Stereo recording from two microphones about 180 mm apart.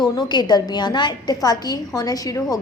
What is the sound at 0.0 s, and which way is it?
A woman's voice, 25° left (ahead or behind).